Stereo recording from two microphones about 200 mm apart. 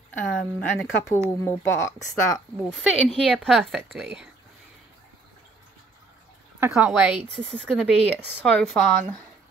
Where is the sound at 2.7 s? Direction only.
Centre (ahead or behind).